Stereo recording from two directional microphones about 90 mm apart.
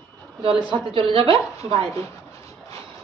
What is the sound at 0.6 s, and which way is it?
Speech, 70° right (ahead or behind).